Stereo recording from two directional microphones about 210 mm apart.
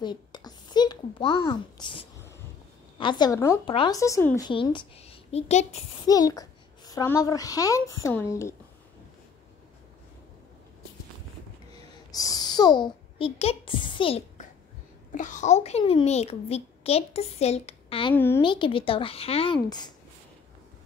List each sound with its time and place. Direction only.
0.0 s a sound: 20° left (ahead or behind)
3.0 s a woman's voice: 20° left (ahead or behind)
4.5 s a woman's voice: 25° left (ahead or behind)
6.0 s a woman's voice: 15° left (ahead or behind)
12.1 s a sound: 15° left (ahead or behind)
15.1 s a woman's voice: 35° left (ahead or behind)
18.1 s a woman's voice: 10° left (ahead or behind)
18.4 s a woman's voice: 25° left (ahead or behind)